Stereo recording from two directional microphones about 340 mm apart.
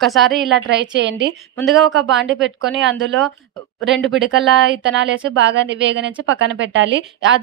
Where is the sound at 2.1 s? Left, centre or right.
Right.